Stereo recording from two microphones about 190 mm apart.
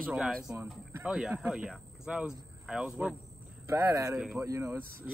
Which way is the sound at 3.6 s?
15° right (ahead or behind).